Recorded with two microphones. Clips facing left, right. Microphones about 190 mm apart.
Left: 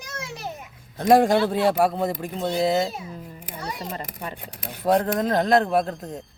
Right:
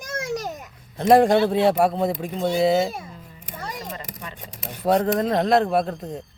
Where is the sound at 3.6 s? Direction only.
45° right (ahead or behind).